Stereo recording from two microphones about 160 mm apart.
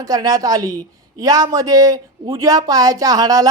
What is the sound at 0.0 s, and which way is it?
Speech, 20° right (ahead or behind).